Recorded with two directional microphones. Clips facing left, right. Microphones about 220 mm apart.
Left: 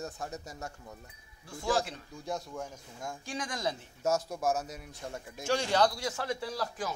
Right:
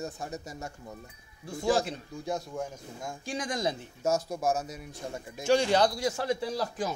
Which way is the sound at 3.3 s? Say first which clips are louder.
Right 4 dB; 15° right (ahead or behind).